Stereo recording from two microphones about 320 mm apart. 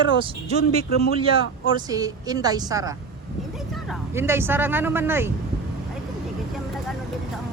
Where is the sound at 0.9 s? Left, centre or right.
Left.